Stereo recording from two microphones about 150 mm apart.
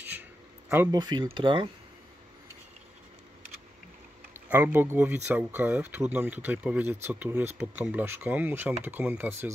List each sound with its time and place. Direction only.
0.9 s speech: 25° right (ahead or behind)
4.3 s speech: 10° right (ahead or behind)